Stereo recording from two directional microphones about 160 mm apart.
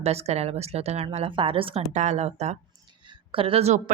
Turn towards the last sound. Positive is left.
turn(degrees=-40)  # may be behind; listen again after turning